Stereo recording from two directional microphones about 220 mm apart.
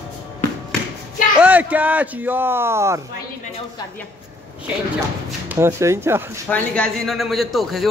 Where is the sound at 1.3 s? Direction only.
5° right (ahead or behind).